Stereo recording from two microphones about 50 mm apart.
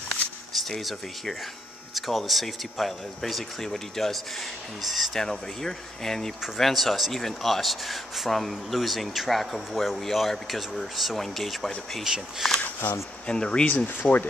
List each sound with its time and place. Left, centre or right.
0.6 s speech: centre
13.3 s speech: centre
14.0 s speech: left